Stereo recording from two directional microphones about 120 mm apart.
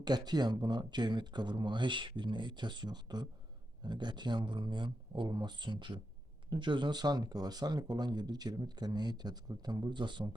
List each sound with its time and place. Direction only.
0.0 s speech: 35° right (ahead or behind)